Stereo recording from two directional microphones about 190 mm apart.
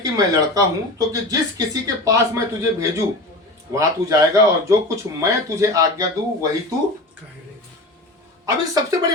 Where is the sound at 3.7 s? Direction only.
15° right (ahead or behind).